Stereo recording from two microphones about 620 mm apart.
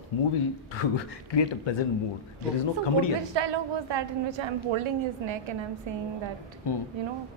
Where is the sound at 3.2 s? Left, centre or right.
Right.